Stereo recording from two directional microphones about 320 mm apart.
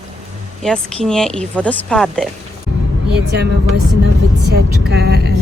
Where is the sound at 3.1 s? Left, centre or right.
Right.